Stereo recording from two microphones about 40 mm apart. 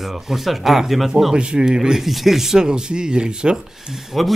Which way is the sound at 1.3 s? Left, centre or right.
Right.